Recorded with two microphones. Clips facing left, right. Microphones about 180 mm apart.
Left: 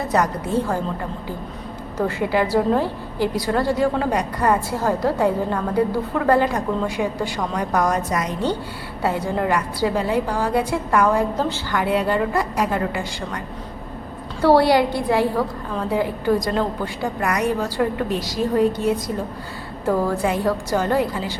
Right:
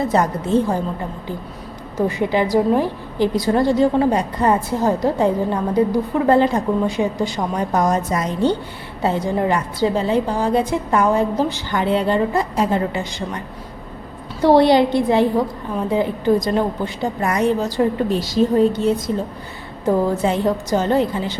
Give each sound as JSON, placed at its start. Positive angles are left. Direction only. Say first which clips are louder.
{"t": 0.1, "sound": "a woman's voice", "louder": "right 3 dB", "side_deg": -25}
{"t": 2.0, "sound": "a woman's voice", "louder": "right 2 dB", "side_deg": -15}
{"t": 14.4, "sound": "a woman's voice", "louder": "right 3 dB", "side_deg": -20}